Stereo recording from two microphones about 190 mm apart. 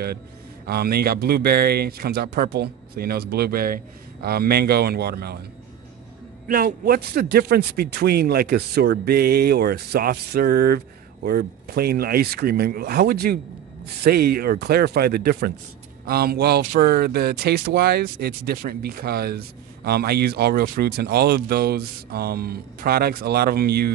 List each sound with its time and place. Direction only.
0.7 s speech: 55° right (ahead or behind)
6.4 s speech: 50° right (ahead or behind)